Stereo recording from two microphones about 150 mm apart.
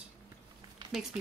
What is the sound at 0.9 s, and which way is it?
Speech, 5° right (ahead or behind).